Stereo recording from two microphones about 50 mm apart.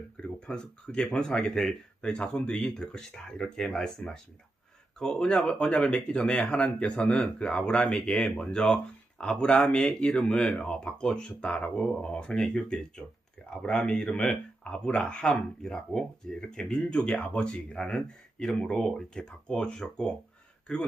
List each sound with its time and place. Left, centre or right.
0.2 s speech: centre